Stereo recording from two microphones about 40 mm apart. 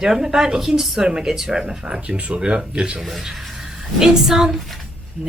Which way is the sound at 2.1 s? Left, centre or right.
Right.